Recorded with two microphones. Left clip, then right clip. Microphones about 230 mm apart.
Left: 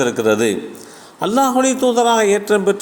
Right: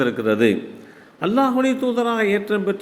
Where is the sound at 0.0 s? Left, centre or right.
Centre.